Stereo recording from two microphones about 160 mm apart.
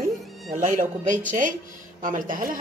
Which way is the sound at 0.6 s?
55° right (ahead or behind).